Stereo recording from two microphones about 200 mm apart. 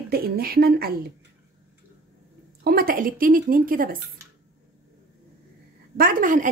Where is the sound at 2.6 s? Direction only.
50° right (ahead or behind).